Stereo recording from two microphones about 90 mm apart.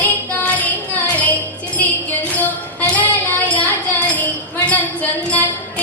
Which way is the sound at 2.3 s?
20° left (ahead or behind).